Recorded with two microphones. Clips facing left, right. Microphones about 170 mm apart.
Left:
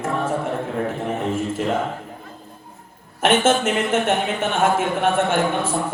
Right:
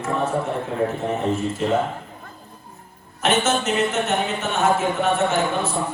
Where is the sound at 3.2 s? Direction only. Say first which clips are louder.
Left 3 dB; 50° left (ahead or behind).